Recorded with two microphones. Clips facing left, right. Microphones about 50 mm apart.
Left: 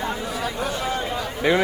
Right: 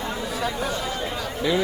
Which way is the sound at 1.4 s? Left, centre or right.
Left.